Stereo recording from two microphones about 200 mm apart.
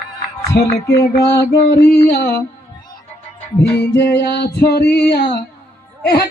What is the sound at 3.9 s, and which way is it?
Music, 55° left (ahead or behind).